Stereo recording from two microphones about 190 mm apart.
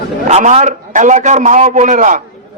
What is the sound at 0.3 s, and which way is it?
A man's voice, 35° right (ahead or behind).